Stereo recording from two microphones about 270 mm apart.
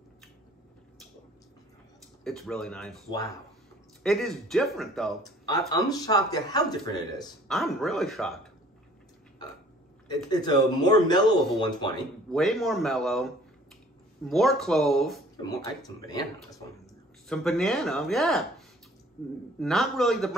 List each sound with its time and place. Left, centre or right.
2.2 s speech: centre
3.1 s speech: centre
4.0 s speech: centre
5.2 s speech: centre
7.4 s speech: centre
10.0 s speech: centre
12.3 s speech: centre
14.3 s speech: centre
15.3 s speech: centre
17.3 s speech: centre
19.6 s speech: centre